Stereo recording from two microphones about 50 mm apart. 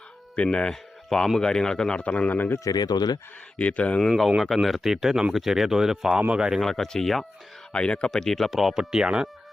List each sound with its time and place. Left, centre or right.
0.3 s speech: centre
3.6 s speech: left
4.3 s speech: centre
6.1 s speech: centre
6.6 s speech: centre
7.7 s speech: centre
8.4 s speech: centre